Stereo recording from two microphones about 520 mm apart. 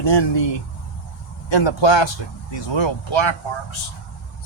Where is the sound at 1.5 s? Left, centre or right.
Left.